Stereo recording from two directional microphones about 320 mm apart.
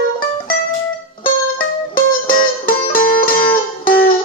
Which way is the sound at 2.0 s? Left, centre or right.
Left.